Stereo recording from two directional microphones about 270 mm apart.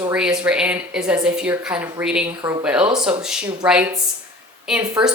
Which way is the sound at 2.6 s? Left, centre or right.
Centre.